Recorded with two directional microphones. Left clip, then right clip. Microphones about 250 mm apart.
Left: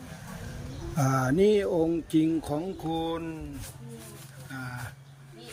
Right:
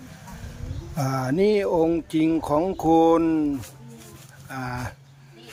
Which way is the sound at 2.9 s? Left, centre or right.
Right.